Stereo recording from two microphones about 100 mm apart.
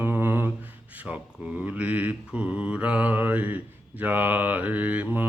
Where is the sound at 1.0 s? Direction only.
15° right (ahead or behind).